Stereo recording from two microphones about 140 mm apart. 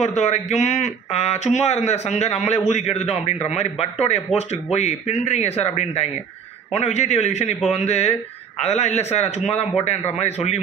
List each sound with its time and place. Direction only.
0.0 s speech: 55° left (ahead or behind)